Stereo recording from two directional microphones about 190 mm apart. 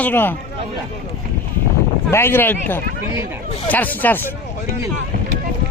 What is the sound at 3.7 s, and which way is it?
Speech, 10° left (ahead or behind).